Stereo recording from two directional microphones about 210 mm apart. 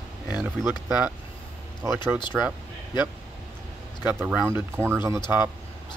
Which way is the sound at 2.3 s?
Centre (ahead or behind).